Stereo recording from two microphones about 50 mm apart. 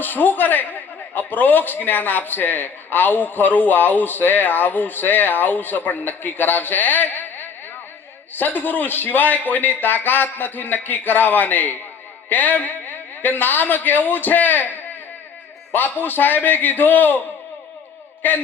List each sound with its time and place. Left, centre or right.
0.0 s a man's voice: left
18.2 s a man's voice: left